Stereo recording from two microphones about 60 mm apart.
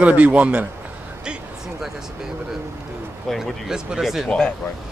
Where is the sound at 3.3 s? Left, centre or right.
Centre.